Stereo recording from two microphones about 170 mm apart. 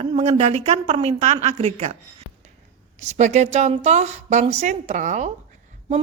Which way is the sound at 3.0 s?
40° right (ahead or behind).